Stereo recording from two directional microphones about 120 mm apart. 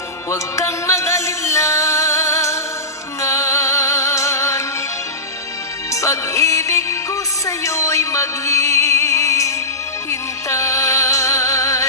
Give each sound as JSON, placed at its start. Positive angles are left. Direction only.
{"t": 0.3, "sound": "music", "side_deg": 25}
{"t": 5.9, "sound": "music", "side_deg": 25}